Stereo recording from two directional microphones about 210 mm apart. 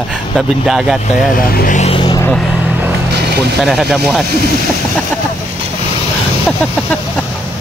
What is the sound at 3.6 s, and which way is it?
Speech, centre (ahead or behind).